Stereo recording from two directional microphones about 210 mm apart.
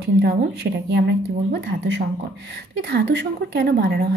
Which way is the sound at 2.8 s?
50° right (ahead or behind).